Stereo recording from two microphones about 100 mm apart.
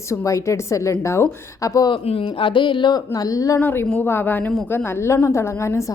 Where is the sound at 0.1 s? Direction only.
30° left (ahead or behind).